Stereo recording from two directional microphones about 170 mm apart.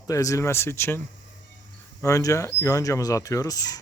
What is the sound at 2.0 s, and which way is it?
Speech, 20° left (ahead or behind).